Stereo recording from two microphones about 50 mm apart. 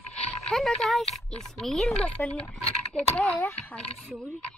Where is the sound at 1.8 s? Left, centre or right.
Left.